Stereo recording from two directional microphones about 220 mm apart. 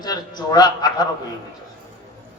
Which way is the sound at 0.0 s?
15° left (ahead or behind).